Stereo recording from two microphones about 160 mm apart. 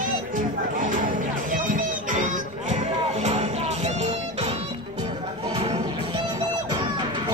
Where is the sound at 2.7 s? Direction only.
45° right (ahead or behind).